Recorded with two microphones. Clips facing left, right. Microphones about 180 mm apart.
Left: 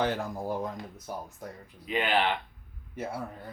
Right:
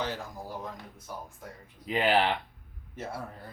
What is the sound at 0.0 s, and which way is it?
Speech, 55° left (ahead or behind).